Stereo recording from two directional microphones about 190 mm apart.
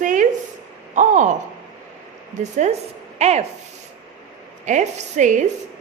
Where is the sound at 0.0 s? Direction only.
45° right (ahead or behind).